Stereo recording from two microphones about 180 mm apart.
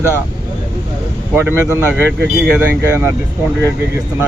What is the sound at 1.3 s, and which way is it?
Speech, 10° right (ahead or behind).